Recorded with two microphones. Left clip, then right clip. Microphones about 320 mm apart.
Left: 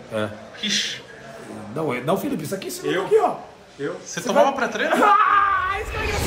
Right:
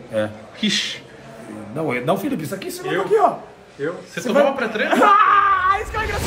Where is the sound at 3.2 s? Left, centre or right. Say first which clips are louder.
Right 3 dB; centre.